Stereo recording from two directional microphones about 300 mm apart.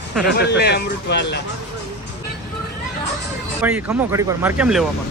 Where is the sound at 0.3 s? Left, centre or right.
Left.